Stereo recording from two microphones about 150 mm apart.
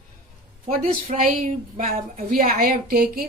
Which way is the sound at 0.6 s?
45° right (ahead or behind).